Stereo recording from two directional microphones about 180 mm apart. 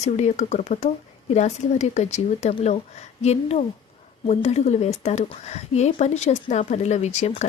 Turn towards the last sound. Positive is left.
turn(degrees=40)  # may be behind; listen again after turning